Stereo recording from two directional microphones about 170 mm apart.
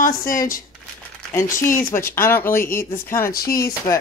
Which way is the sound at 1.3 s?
15° left (ahead or behind).